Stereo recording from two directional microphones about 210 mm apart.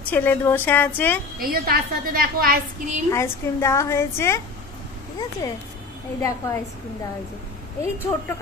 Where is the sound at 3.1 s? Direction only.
15° left (ahead or behind).